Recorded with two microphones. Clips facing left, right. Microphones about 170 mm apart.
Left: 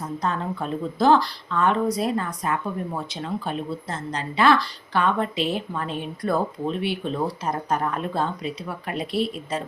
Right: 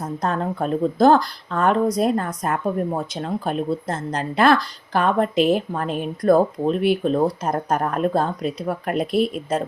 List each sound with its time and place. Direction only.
0.2 s speech: 50° right (ahead or behind)